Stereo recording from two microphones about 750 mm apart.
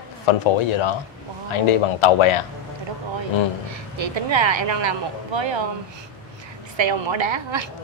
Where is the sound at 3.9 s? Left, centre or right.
Right.